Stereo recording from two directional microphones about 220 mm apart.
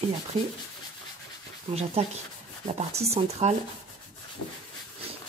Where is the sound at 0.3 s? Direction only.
25° right (ahead or behind).